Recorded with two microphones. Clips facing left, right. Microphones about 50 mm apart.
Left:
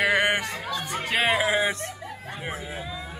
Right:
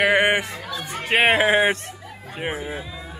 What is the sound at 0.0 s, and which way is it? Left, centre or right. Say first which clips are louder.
Chatter: right 4 dB; right.